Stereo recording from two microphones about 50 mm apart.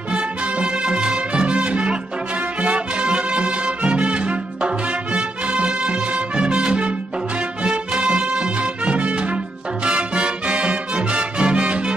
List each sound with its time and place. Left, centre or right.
0.1 s music: right